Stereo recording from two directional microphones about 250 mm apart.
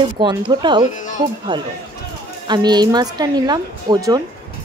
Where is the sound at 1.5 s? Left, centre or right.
Centre.